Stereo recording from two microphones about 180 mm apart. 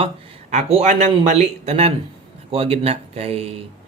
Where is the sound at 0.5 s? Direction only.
40° right (ahead or behind).